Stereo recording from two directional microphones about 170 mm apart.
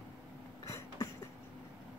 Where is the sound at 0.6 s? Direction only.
20° left (ahead or behind).